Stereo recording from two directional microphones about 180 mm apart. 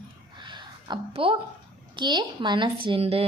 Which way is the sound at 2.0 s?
25° right (ahead or behind).